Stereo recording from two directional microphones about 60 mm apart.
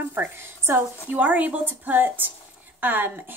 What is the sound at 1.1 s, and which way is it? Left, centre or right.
A woman's voice, right.